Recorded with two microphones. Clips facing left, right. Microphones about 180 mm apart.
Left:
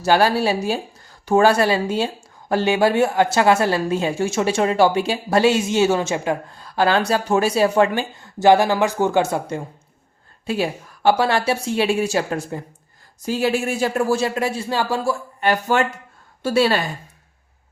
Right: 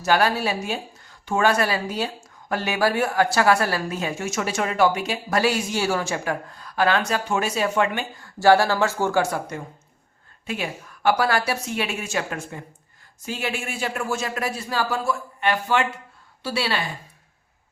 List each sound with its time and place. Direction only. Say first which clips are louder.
0.0 s a man's voice: left 4 dB; 30° left (ahead or behind)
8.1 s a woman's voice: left 1 dB; 20° left (ahead or behind); by 16.8 s 45° left (ahead or behind)